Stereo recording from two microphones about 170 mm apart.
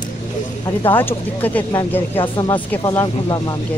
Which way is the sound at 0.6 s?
15° left (ahead or behind).